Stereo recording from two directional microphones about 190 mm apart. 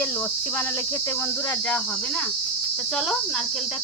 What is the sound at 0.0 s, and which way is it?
Cricket, 10° left (ahead or behind).